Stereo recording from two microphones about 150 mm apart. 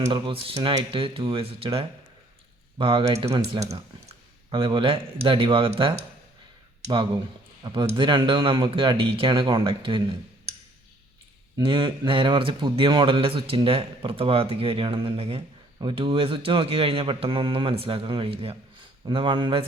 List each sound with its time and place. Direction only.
0.1 s speech: 35° right (ahead or behind)
7.6 s speech: 30° right (ahead or behind)
11.5 s speech: 35° right (ahead or behind)